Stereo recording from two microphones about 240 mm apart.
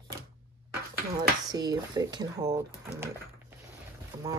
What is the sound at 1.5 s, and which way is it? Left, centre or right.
Speech, centre.